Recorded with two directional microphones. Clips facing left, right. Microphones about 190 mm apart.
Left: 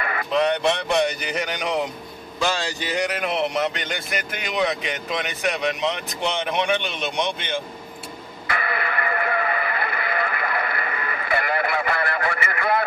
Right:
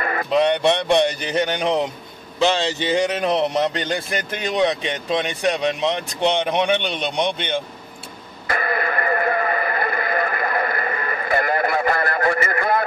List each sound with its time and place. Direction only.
0.0 s a sound: 40° right (ahead or behind)
0.3 s speech: 25° right (ahead or behind)
3.3 s speech: 35° right (ahead or behind)
8.5 s radio: 40° right (ahead or behind)